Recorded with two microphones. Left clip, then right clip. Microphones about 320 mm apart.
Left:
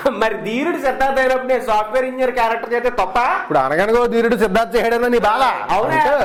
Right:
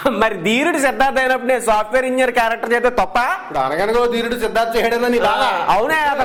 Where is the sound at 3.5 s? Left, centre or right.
Left.